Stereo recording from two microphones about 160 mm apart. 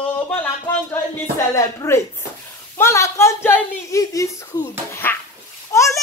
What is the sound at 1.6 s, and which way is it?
A woman's voice, 20° left (ahead or behind).